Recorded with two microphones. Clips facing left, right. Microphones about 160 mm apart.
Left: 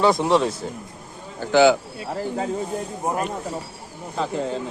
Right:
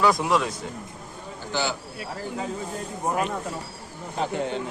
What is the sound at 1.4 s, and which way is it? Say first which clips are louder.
Speech: left 13 dB; 65° left (ahead or behind).